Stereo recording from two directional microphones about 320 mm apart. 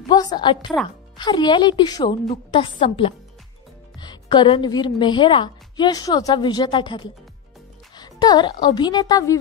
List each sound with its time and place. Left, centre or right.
0.1 s a woman's voice: centre